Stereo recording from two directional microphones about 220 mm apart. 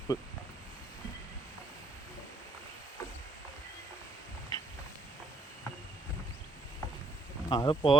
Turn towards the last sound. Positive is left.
turn(degrees=20)  # may be behind; listen again after turning